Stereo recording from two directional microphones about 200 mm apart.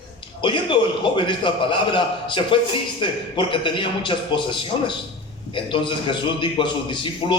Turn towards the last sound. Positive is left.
turn(degrees=25)  # may be behind; listen again after turning